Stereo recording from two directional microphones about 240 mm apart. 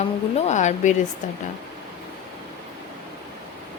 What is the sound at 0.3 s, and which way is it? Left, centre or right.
Speech, left.